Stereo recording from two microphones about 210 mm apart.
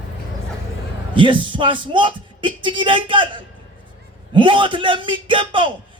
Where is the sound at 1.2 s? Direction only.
25° right (ahead or behind).